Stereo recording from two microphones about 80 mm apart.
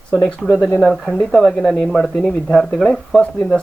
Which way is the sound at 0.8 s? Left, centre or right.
Centre.